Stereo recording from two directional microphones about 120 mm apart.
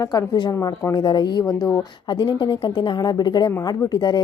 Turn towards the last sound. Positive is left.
turn(degrees=35)  # may be behind; listen again after turning